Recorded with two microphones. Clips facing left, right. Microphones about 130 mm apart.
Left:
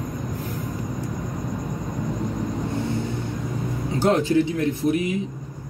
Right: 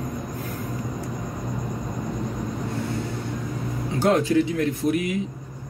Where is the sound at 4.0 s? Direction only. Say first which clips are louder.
Even; 30° left (ahead or behind).